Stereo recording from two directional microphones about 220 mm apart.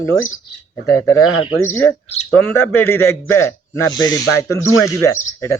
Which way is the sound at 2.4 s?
10° left (ahead or behind).